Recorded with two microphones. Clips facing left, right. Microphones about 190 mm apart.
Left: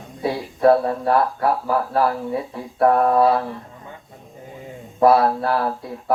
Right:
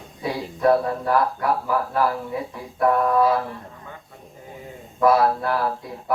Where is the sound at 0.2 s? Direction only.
35° left (ahead or behind).